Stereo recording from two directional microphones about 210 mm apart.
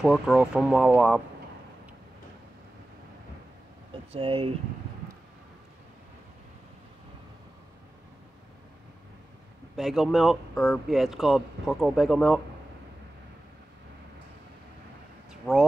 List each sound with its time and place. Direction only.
0.0 s speech: centre (ahead or behind)
4.1 s speech: 25° right (ahead or behind)
9.8 s speech: centre (ahead or behind)
15.5 s speech: 10° left (ahead or behind)